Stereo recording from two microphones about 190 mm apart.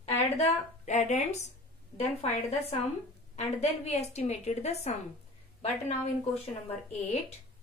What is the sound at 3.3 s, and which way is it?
A woman's voice, 35° left (ahead or behind).